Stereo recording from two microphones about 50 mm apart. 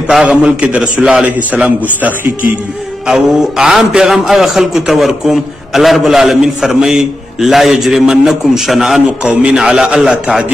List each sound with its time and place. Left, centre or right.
0.2 s a man's voice: centre
3.1 s a man's voice: centre
9.2 s a man's voice: right
9.6 s a man's voice: centre